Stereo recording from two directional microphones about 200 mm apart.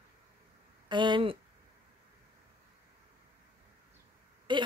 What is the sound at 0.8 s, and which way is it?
Speech, 25° right (ahead or behind).